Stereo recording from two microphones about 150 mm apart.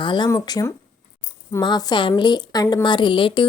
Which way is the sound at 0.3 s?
20° left (ahead or behind).